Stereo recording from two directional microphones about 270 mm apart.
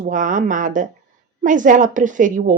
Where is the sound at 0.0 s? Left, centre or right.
Right.